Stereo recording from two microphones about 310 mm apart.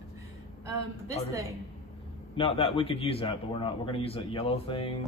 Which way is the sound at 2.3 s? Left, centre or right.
Centre.